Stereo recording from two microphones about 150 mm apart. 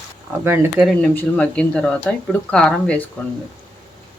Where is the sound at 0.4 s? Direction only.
15° right (ahead or behind).